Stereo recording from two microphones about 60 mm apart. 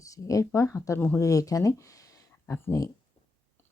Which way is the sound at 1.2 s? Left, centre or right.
Left.